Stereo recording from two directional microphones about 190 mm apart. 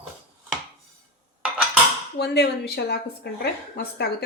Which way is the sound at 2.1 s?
60° left (ahead or behind).